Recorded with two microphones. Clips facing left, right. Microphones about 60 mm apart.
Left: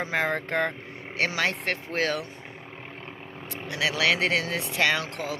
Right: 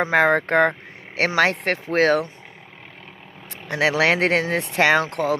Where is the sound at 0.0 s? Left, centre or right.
Right.